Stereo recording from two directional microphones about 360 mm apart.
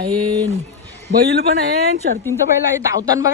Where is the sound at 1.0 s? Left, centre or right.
Right.